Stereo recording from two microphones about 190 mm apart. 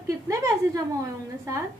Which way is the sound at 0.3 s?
15° right (ahead or behind).